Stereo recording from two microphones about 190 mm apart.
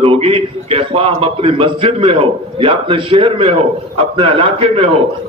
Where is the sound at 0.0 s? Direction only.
30° right (ahead or behind).